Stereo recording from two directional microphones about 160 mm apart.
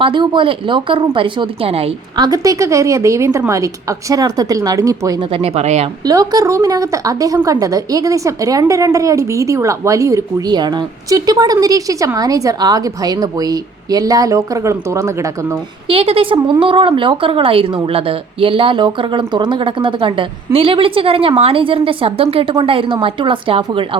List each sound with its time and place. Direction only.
0.0 s speech: 30° right (ahead or behind)
2.2 s a woman's voice: 20° right (ahead or behind)
5.3 s speech: 40° right (ahead or behind)
6.1 s a woman's voice: 20° right (ahead or behind)
15.9 s speech: 35° right (ahead or behind)